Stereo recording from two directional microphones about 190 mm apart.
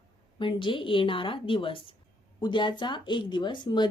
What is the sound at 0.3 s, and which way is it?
Speech, 25° left (ahead or behind).